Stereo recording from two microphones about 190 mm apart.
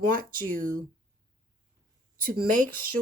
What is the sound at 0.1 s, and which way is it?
Speech, 45° right (ahead or behind).